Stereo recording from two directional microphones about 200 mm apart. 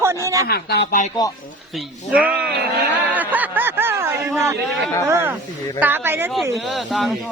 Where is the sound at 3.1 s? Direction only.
10° right (ahead or behind).